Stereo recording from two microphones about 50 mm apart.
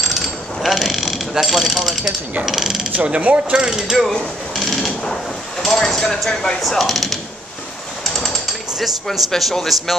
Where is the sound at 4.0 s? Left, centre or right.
Centre.